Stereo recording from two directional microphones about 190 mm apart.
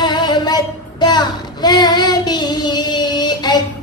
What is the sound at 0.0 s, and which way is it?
Child singing, 20° left (ahead or behind).